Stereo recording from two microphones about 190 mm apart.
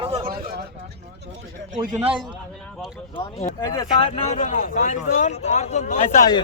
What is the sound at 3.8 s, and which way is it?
Speech, 30° left (ahead or behind).